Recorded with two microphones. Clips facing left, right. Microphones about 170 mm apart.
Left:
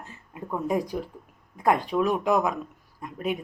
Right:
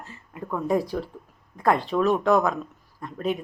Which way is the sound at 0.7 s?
15° left (ahead or behind).